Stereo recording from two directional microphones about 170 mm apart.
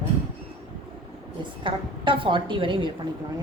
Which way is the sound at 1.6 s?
30° right (ahead or behind).